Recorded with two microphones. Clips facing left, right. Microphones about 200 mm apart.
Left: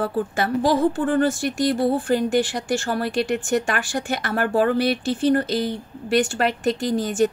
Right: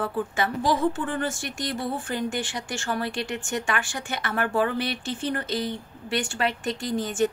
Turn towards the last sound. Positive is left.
turn(degrees=35)  # may be behind; listen again after turning